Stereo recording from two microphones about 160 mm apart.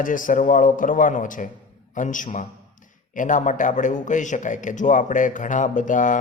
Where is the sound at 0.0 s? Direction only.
55° left (ahead or behind).